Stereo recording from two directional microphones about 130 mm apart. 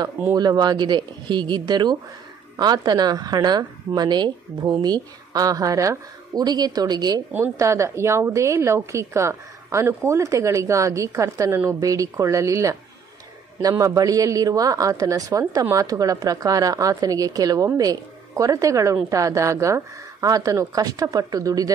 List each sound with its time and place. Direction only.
0.3 s a woman's voice: 30° right (ahead or behind)
7.3 s a woman's voice: 20° right (ahead or behind)